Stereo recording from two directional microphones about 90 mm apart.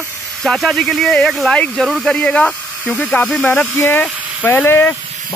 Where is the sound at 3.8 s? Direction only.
25° left (ahead or behind).